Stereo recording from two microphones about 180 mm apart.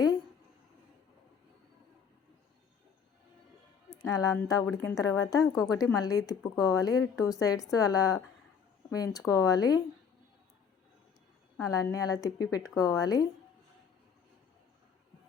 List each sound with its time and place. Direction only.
3.9 s a woman's voice: 20° left (ahead or behind)
5.5 s speech: centre (ahead or behind)
5.7 s a woman's voice: 20° left (ahead or behind)
11.6 s a woman's voice: 20° left (ahead or behind)